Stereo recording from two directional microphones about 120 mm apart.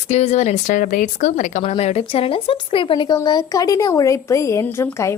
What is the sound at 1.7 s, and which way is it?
Speech, 60° left (ahead or behind).